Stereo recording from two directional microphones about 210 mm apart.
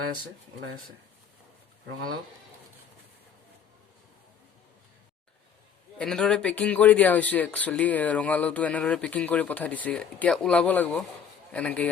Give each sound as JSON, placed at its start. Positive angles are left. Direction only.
{"t": 6.0, "sound": "a man's voice", "side_deg": 5}